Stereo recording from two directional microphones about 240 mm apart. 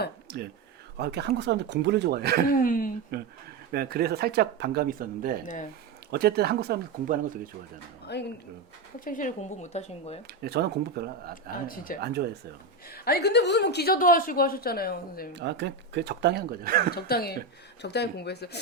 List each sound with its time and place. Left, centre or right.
0.9 s speech: right
2.6 s a woman's voice: left
3.1 s speech: right
8.1 s speech: left
9.0 s speech: left
10.4 s speech: right
11.7 s a woman's voice: left
11.9 s speech: right
12.9 s a woman's voice: left
15.4 s speech: right
16.9 s a woman's voice: left